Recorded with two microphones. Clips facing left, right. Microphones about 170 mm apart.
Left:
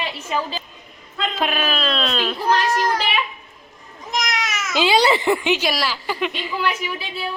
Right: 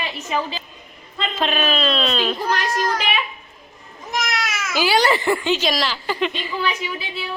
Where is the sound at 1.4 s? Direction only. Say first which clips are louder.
Right 2 dB; 5° left (ahead or behind).